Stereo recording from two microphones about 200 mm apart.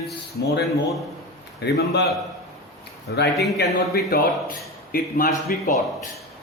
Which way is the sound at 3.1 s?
55° left (ahead or behind).